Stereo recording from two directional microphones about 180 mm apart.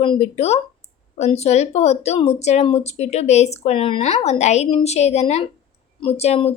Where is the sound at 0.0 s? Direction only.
35° left (ahead or behind).